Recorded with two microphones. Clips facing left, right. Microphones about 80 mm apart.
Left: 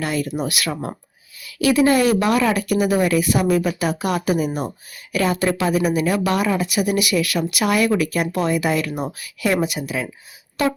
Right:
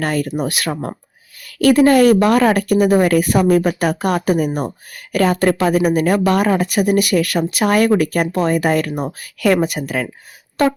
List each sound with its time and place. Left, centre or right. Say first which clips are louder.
0.0 s speech: right 4 dB; right
1.4 s speech: right 5 dB; right
8.9 s speech: right 3 dB; centre
9.1 s speech: right 6 dB; right